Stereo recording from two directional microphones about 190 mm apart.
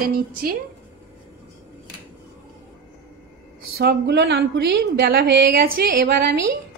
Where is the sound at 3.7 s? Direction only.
60° right (ahead or behind).